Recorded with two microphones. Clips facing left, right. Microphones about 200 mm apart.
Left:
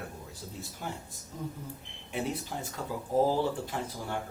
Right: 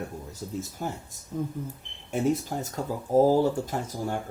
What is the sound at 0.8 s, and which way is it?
Speech, 45° right (ahead or behind).